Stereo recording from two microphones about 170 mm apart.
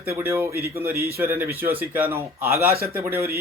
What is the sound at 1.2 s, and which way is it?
Speech, 15° right (ahead or behind).